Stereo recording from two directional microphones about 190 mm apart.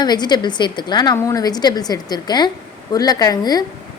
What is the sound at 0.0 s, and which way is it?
A woman's voice, 20° left (ahead or behind).